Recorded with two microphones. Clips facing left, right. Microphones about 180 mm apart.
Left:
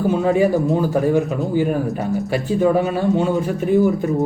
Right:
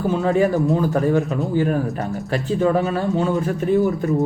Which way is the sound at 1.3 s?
Centre (ahead or behind).